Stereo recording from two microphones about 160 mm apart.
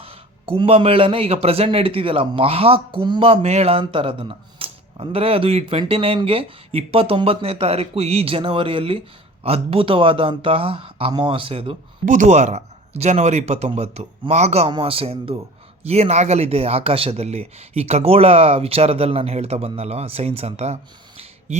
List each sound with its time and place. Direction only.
0.0 s a man's voice: 35° right (ahead or behind)
12.0 s a man's voice: 50° right (ahead or behind)
21.2 s a sound: 45° right (ahead or behind)